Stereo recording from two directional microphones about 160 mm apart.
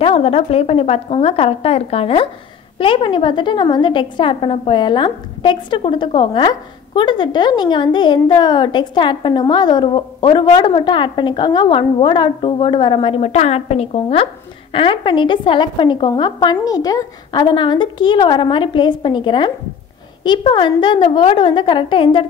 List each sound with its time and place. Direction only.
0.0 s a woman's voice: 35° left (ahead or behind)